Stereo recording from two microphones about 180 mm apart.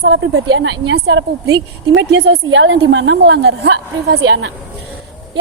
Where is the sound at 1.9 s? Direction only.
85° right.